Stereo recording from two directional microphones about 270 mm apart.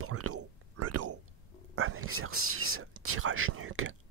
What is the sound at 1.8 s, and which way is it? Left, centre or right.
Whispering, right.